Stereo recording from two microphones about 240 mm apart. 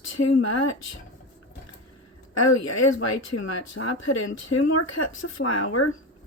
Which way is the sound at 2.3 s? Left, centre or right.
Left.